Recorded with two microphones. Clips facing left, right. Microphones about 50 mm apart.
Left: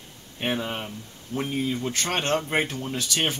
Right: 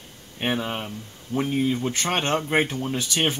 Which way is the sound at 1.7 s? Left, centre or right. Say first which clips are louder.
Right 2 dB; right.